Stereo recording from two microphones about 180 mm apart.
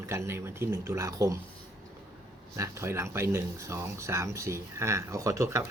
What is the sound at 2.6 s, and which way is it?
A man's voice, 15° right (ahead or behind).